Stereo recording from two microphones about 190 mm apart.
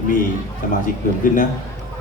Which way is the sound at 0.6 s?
45° left (ahead or behind).